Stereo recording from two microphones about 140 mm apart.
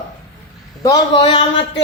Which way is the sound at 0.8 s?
35° left (ahead or behind).